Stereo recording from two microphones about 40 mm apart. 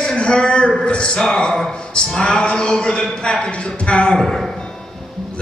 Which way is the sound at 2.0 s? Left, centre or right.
Left.